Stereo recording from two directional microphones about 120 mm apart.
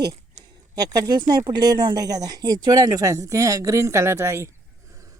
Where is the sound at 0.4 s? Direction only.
70° right (ahead or behind).